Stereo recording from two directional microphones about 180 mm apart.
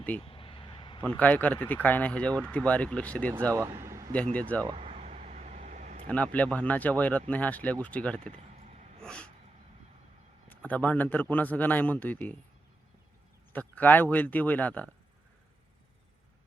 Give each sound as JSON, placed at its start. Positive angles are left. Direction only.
{"t": 0.2, "sound": "a sound", "side_deg": 30}
{"t": 1.0, "sound": "speech", "side_deg": 10}
{"t": 3.5, "sound": "speech", "side_deg": -15}
{"t": 4.4, "sound": "speech", "side_deg": 5}
{"t": 4.7, "sound": "a sound", "side_deg": -35}
{"t": 6.1, "sound": "speech", "side_deg": 10}
{"t": 8.6, "sound": "dog", "side_deg": -40}
{"t": 9.0, "sound": "dog", "side_deg": 5}
{"t": 10.5, "sound": "speech", "side_deg": 10}
{"t": 13.5, "sound": "speech", "side_deg": 10}